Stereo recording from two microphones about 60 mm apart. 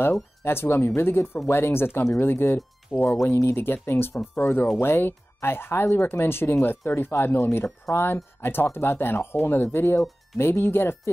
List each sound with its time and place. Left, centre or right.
0.4 s speech: left
2.9 s speech: centre
3.3 s speech: left